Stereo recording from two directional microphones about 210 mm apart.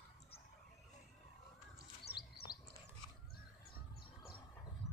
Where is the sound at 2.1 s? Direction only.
50° left (ahead or behind).